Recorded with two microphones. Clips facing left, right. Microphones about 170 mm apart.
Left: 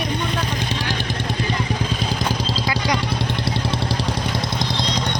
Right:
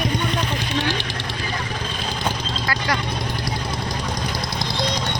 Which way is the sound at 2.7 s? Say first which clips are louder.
Left 1 dB; 15° left (ahead or behind).